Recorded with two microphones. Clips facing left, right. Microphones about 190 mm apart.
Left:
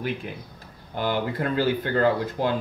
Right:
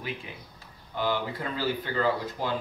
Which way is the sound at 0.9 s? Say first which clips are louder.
Left 4 dB; 55° left (ahead or behind).